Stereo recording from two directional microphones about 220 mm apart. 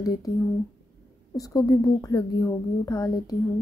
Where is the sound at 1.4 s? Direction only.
15° left (ahead or behind).